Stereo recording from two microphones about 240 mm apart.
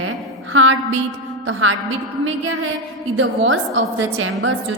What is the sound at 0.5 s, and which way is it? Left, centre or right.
Speech, right.